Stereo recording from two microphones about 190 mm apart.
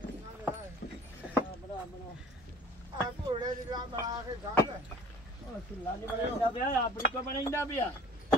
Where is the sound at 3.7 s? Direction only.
20° right (ahead or behind).